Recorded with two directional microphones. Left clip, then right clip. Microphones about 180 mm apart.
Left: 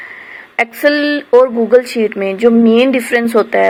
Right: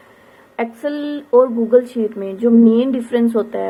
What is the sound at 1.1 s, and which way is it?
Speech, 30° left (ahead or behind).